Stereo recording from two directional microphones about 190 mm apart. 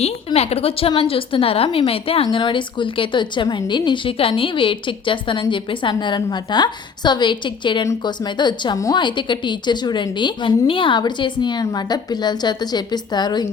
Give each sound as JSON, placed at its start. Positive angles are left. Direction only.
{"t": 0.3, "sound": "a woman's voice", "side_deg": 30}